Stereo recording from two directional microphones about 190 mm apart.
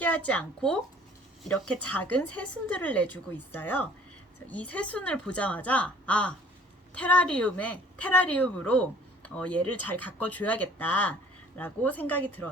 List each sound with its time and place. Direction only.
0.0 s speech: 5° left (ahead or behind)